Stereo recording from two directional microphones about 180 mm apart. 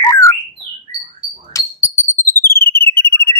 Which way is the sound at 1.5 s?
15° left (ahead or behind).